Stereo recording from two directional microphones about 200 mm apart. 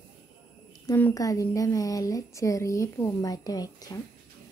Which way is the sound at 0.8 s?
15° left (ahead or behind).